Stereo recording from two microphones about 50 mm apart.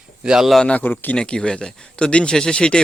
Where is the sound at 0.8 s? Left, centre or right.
Left.